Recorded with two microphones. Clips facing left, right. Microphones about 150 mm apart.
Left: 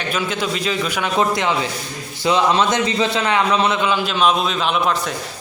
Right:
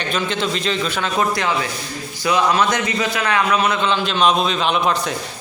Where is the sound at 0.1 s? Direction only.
10° left (ahead or behind); by 3.8 s 25° left (ahead or behind).